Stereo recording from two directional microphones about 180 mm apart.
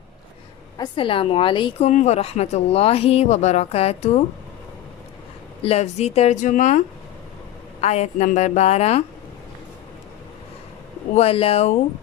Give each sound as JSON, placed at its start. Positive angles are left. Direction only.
{"t": 0.8, "sound": "a woman's voice", "side_deg": 30}
{"t": 1.9, "sound": "speech", "side_deg": 40}
{"t": 5.6, "sound": "speech", "side_deg": 35}
{"t": 11.1, "sound": "speech", "side_deg": 35}